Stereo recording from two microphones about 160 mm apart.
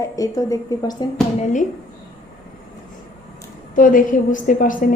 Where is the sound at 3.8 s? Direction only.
55° left (ahead or behind).